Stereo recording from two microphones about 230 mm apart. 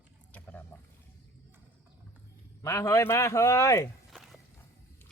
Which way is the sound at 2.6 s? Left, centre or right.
Centre.